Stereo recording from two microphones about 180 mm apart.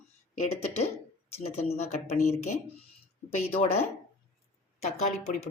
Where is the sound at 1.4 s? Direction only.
35° left (ahead or behind).